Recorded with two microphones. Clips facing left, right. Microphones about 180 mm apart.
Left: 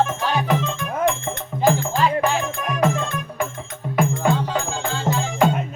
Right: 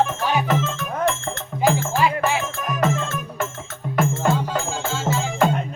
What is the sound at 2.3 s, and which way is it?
Music, centre (ahead or behind).